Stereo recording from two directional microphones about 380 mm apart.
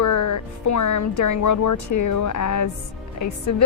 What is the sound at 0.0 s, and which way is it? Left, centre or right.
Speech, left.